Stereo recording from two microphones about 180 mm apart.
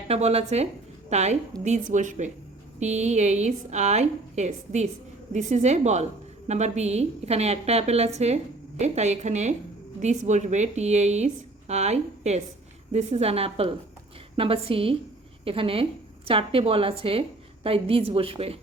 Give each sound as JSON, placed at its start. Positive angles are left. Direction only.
{"t": 0.1, "sound": "a woman's voice", "side_deg": -35}